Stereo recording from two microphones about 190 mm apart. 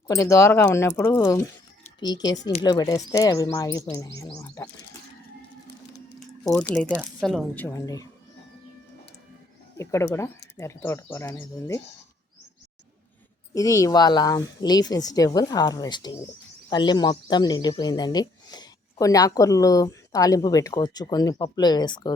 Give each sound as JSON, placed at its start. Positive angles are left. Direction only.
{"t": 0.1, "sound": "speech", "side_deg": 15}
{"t": 6.7, "sound": "speech", "side_deg": 5}
{"t": 9.7, "sound": "speech", "side_deg": 15}
{"t": 13.5, "sound": "speech", "side_deg": 15}